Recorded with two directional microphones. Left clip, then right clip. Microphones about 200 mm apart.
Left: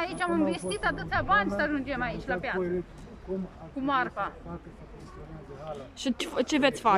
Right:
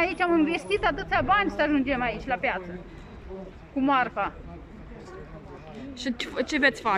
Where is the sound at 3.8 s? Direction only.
10° right (ahead or behind).